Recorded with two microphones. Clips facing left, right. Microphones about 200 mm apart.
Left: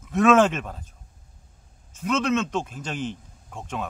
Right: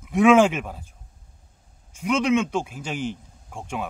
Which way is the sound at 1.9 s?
10° right (ahead or behind).